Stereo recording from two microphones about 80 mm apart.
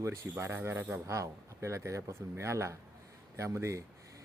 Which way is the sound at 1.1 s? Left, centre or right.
Right.